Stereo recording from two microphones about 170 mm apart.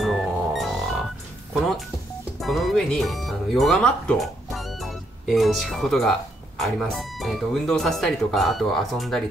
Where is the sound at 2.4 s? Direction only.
Centre (ahead or behind).